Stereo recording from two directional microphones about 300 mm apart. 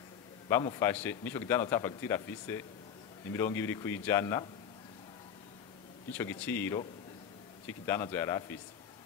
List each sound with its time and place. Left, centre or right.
0.5 s a man's voice: centre
6.1 s a man's voice: centre